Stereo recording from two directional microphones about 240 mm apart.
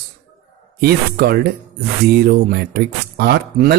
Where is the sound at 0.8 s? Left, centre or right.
Right.